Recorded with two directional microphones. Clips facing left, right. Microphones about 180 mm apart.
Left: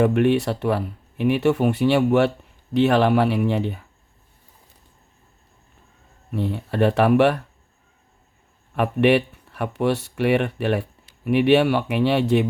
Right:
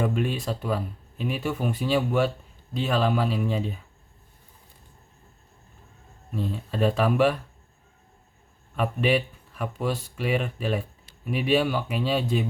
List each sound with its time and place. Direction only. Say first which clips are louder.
0.0 s speech: left 9 dB; 70° left (ahead or behind)
6.3 s speech: left 5 dB; 70° left (ahead or behind)
8.7 s speech: left 6 dB; 65° left (ahead or behind)